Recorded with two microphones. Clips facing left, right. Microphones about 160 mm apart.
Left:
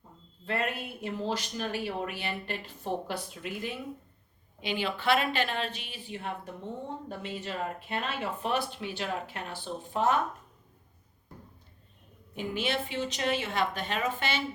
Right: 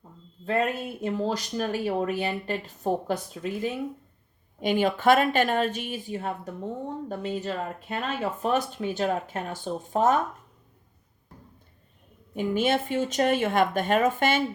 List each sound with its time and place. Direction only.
0.4 s speech: 45° right (ahead or behind)
12.3 s speech: 50° right (ahead or behind)